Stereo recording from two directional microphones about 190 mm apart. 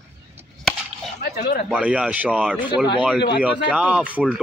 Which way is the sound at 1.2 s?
55° left (ahead or behind).